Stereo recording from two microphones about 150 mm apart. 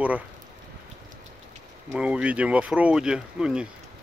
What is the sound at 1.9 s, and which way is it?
Speech, 10° right (ahead or behind).